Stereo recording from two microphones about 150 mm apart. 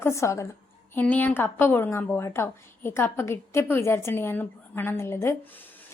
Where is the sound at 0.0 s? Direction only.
20° left (ahead or behind).